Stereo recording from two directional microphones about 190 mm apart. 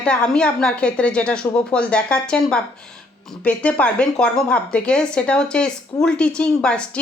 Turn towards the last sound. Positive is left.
turn(degrees=5)  # may be behind; listen again after turning